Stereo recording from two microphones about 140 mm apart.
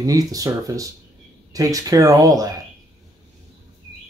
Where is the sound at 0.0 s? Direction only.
25° right (ahead or behind).